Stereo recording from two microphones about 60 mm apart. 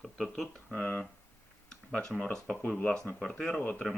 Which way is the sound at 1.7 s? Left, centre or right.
Centre.